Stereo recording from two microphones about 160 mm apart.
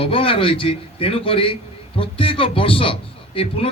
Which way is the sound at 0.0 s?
35° left (ahead or behind).